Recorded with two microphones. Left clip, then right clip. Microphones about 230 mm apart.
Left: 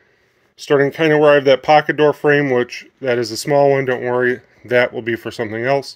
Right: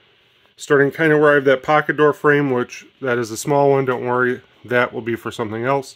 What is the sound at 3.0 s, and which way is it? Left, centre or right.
Speech, centre.